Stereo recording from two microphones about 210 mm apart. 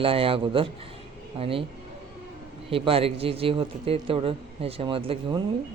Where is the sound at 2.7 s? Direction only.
25° right (ahead or behind).